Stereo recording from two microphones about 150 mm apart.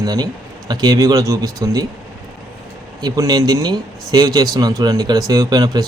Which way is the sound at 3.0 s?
25° right (ahead or behind).